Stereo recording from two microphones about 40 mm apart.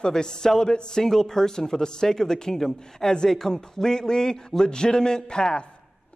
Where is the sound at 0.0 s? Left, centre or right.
Centre.